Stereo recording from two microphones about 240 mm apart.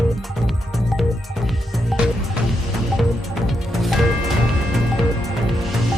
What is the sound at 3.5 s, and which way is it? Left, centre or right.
Music, centre.